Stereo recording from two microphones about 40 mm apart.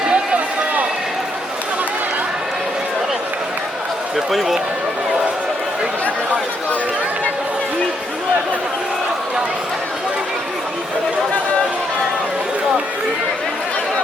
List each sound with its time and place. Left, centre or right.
0.1 s run: right
4.3 s a man's voice: centre